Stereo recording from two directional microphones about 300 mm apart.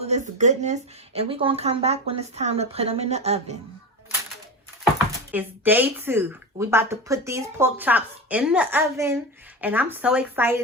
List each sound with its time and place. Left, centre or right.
0.0 s a woman's voice: right
5.3 s speech: centre